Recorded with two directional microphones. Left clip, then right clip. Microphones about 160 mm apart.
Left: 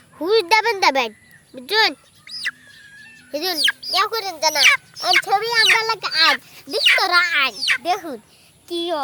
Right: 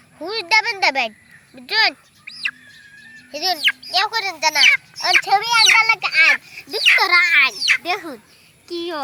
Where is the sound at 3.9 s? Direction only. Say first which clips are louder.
Right 1 dB; 75° left (ahead or behind).